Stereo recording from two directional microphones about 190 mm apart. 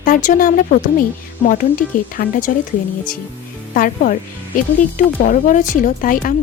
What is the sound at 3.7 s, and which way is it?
Speech, 45° left (ahead or behind).